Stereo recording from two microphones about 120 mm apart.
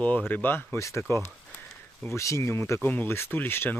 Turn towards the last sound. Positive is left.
turn(degrees=15)  # may be behind; listen again after turning